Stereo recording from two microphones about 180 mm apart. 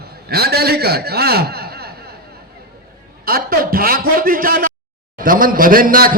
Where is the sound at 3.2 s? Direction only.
55° right (ahead or behind).